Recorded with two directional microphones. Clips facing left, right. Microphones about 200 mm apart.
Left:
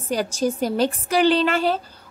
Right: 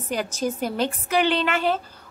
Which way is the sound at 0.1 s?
35° left (ahead or behind).